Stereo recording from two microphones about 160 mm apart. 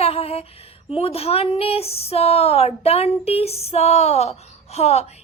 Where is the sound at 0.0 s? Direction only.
40° left (ahead or behind).